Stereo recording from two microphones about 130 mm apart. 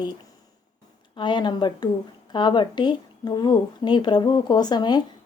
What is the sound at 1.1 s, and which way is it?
Speech, 35° left (ahead or behind).